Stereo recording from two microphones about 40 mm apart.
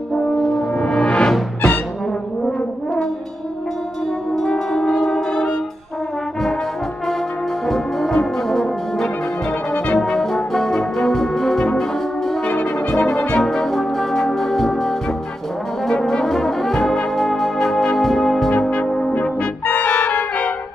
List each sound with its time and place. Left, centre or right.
0.4 s brass instrument: centre
0.7 s music: centre
4.4 s brass instrument: centre
7.6 s brass instrument: centre
12.4 s brass instrument: left
13.4 s brass instrument: centre
18.5 s brass instrument: left
19.6 s brass instrument: left